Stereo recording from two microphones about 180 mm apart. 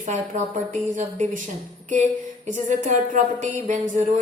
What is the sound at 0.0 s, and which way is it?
Speech, 45° right (ahead or behind).